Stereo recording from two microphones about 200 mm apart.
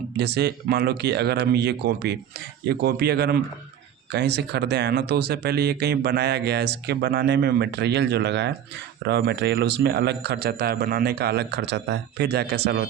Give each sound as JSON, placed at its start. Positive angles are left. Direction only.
{"t": 0.2, "sound": "a man's voice", "side_deg": -55}